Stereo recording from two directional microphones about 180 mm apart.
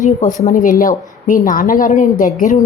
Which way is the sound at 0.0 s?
45° left (ahead or behind).